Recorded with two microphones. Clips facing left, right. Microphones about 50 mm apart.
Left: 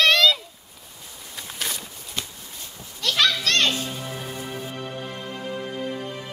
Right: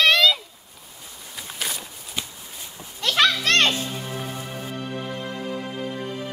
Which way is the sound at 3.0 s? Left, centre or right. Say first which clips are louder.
Right 2 dB; right.